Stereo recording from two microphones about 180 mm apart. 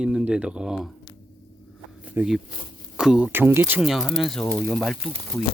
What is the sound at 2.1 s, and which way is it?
Speech, 5° right (ahead or behind).